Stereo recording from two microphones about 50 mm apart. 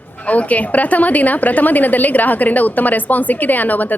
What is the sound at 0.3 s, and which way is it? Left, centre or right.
A woman's voice, left.